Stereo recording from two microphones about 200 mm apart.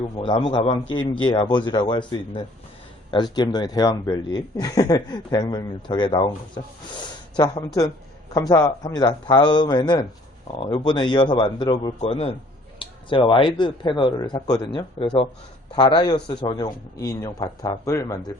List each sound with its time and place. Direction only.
0.2 s speech: 25° left (ahead or behind)